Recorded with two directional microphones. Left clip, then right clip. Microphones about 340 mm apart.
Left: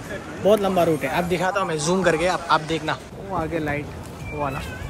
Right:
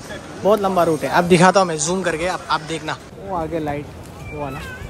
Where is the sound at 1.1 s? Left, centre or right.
Centre.